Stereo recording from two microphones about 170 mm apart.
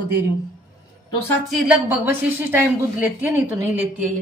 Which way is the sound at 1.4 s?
Centre (ahead or behind).